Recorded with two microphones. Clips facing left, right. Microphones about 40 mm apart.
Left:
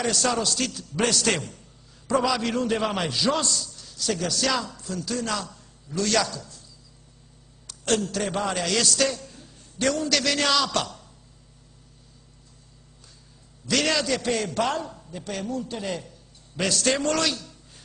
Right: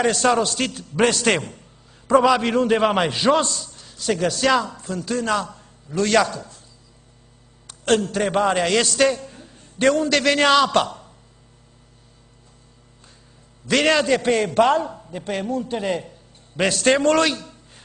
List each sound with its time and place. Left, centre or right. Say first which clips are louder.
0.0 s a man's voice: right 6 dB; right
7.6 s a man's voice: right 6 dB; right
13.7 s a man's voice: right 6 dB; right